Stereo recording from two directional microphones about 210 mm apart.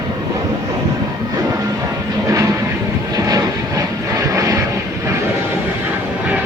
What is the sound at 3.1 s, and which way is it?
Vehicle, 15° right (ahead or behind).